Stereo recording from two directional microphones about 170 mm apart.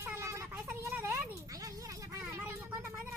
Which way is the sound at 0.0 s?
15° right (ahead or behind).